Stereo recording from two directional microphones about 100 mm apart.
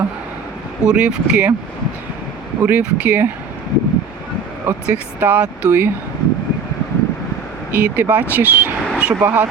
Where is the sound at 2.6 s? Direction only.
20° right (ahead or behind).